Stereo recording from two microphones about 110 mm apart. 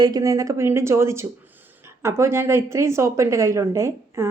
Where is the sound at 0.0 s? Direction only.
35° right (ahead or behind).